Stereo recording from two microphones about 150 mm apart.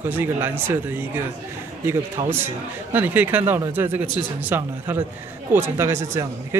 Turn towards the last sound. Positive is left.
turn(degrees=-20)  # may be behind; listen again after turning